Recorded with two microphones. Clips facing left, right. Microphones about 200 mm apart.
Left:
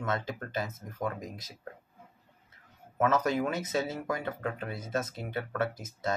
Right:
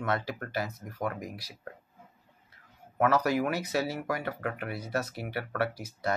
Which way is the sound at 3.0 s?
25° left (ahead or behind).